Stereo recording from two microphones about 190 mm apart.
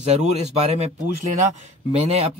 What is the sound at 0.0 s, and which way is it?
Speech, 35° right (ahead or behind).